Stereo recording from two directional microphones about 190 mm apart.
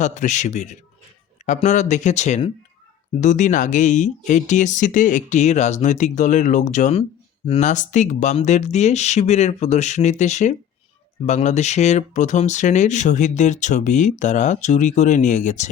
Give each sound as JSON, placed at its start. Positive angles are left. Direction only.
{"t": 0.0, "sound": "speech", "side_deg": 40}